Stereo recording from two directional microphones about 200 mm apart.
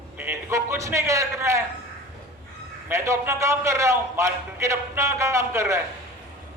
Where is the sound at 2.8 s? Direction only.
15° right (ahead or behind).